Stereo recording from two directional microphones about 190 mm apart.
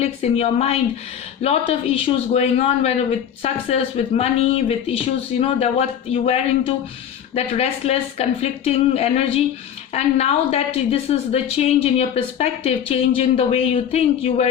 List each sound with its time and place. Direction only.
0.0 s a woman's voice: 35° left (ahead or behind)